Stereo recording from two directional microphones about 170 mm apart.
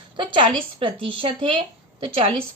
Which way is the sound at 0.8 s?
30° right (ahead or behind).